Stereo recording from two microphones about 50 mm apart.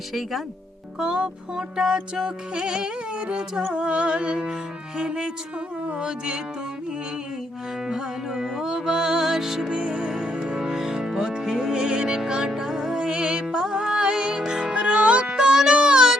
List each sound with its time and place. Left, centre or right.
0.1 s speech: centre
0.9 s music: centre
7.9 s music: centre